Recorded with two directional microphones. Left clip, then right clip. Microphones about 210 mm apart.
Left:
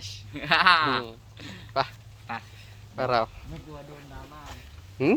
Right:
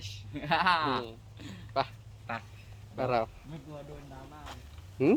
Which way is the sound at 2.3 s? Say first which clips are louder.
Left 3 dB; 55° right (ahead or behind).